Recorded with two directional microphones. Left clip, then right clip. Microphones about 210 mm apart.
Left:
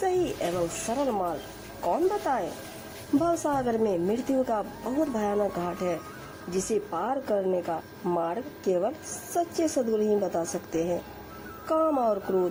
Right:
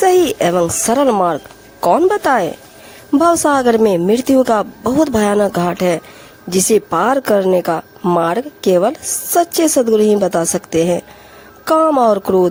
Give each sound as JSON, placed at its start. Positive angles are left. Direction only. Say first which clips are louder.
{"t": 0.0, "sound": "a woman's voice", "louder": "right 15 dB", "side_deg": -40}